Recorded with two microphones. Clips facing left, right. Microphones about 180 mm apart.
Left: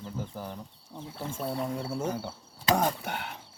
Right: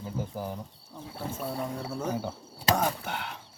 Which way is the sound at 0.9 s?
20° left (ahead or behind).